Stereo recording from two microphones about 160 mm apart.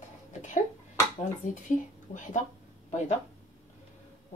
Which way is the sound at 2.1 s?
50° left (ahead or behind).